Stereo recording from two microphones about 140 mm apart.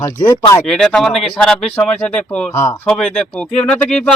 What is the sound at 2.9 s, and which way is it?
Speech, 5° left (ahead or behind).